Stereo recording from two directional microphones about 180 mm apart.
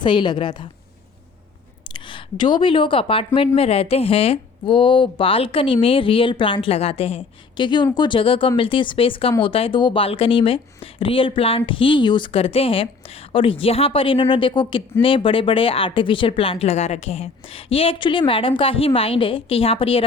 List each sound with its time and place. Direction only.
0.0 s speech: 25° left (ahead or behind)
1.9 s a woman's voice: 25° left (ahead or behind)